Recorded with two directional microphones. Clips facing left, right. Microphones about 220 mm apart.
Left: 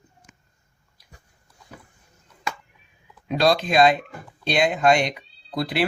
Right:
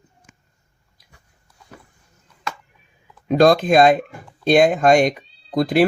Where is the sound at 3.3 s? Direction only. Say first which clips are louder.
Right 6 dB; 50° right (ahead or behind).